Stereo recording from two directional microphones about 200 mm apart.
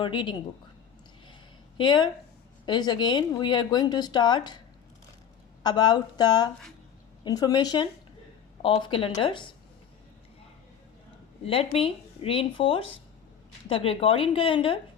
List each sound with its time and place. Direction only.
0.0 s speech: 25° left (ahead or behind)
1.8 s speech: 20° left (ahead or behind)
5.6 s speech: 20° left (ahead or behind)
11.4 s speech: 30° left (ahead or behind)